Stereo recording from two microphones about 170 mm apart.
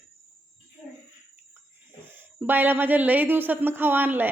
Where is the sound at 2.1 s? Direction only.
10° right (ahead or behind).